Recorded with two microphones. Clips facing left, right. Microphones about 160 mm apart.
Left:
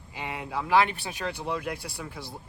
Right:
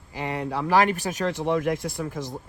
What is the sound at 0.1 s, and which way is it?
Speech, 40° right (ahead or behind).